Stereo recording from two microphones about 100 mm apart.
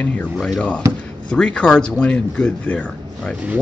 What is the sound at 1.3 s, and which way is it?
Speech, 10° left (ahead or behind).